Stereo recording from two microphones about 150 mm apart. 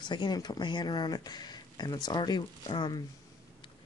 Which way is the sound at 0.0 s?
30° left (ahead or behind).